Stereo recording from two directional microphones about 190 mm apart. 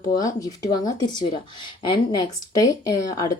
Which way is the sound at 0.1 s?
20° left (ahead or behind).